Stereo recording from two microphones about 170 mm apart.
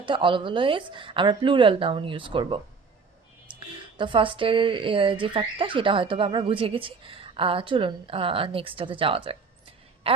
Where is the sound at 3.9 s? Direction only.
30° right (ahead or behind).